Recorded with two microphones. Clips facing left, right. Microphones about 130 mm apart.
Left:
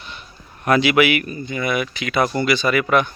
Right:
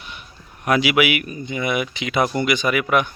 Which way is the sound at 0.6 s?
10° right (ahead or behind).